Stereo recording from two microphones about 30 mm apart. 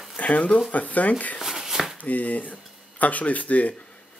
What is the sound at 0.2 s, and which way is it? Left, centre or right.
Speech, left.